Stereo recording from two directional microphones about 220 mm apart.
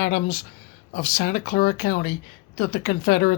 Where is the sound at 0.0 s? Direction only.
40° left (ahead or behind).